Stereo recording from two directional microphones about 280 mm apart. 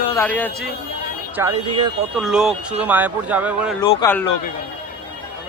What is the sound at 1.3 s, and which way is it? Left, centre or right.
Speech, centre.